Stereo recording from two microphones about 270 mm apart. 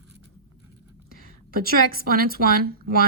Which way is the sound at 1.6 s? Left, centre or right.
Right.